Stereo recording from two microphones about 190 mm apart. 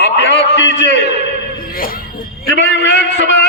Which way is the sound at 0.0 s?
70° left (ahead or behind).